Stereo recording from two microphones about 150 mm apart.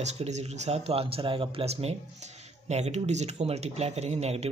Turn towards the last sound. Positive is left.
turn(degrees=-45)  # may be behind; listen again after turning